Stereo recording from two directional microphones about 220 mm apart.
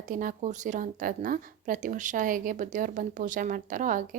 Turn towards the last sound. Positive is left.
turn(degrees=-35)  # may be behind; listen again after turning